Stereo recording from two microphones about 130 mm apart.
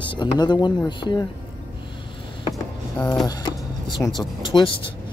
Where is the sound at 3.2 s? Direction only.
30° left (ahead or behind).